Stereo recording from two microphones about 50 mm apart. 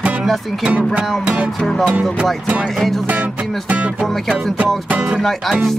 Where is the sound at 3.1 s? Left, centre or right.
Right.